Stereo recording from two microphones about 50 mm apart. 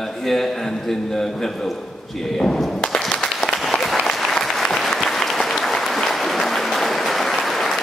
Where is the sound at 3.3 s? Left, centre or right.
Centre.